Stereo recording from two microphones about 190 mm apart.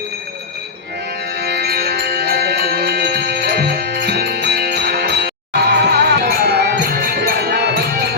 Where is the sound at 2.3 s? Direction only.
60° right (ahead or behind).